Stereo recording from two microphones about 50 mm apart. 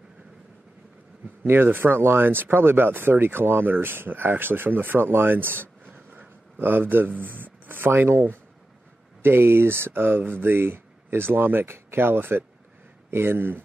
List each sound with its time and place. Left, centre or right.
1.4 s speech: right
9.2 s speech: right